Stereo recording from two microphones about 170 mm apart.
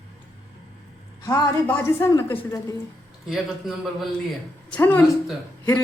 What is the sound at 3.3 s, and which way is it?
Speech, centre (ahead or behind).